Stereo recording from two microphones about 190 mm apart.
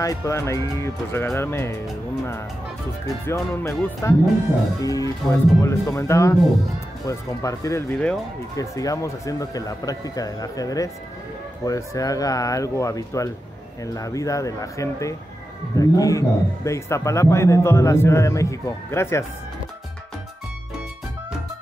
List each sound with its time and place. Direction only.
0.0 s a man's voice: 15° left (ahead or behind)
3.3 s a man's voice: 15° left (ahead or behind)